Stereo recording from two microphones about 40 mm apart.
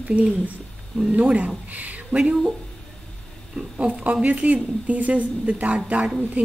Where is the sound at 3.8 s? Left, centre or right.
Right.